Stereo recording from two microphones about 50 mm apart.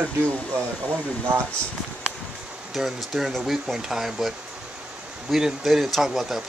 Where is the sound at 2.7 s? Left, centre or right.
Centre.